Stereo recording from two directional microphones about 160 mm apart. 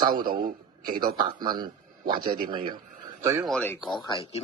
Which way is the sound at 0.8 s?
60° right (ahead or behind).